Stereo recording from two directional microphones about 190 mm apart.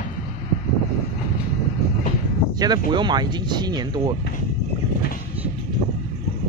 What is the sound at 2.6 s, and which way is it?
Speech, 20° right (ahead or behind).